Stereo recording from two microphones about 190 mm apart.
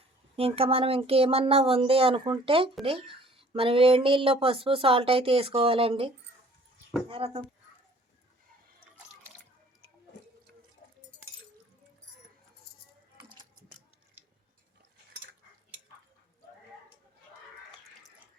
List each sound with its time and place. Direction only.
0.3 s speech: 30° right (ahead or behind)
7.1 s speech: 30° right (ahead or behind)